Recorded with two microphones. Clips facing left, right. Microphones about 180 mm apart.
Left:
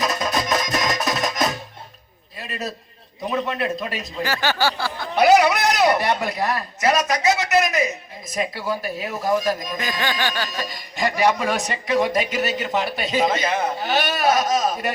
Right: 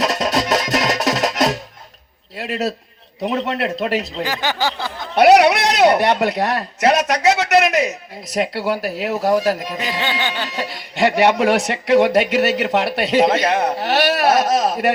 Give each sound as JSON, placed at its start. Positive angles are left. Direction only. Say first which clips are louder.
{"t": 0.0, "sound": "music", "louder": "right 4 dB", "side_deg": -80}
{"t": 2.4, "sound": "a sound", "louder": "right 8 dB", "side_deg": -75}
{"t": 3.2, "sound": "speech", "louder": "right 3 dB", "side_deg": -75}
{"t": 4.2, "sound": "a sound", "louder": "right 1 dB", "side_deg": -15}
{"t": 5.1, "sound": "speech", "louder": "right 4 dB", "side_deg": -70}
{"t": 10.0, "sound": "music", "louder": "left 1 dB", "side_deg": -20}
{"t": 10.7, "sound": "speech", "louder": "right 7 dB", "side_deg": -70}